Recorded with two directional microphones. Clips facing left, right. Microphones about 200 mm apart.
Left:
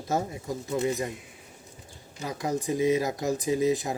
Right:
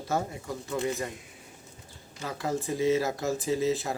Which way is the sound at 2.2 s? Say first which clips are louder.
Left 2 dB; 15° left (ahead or behind).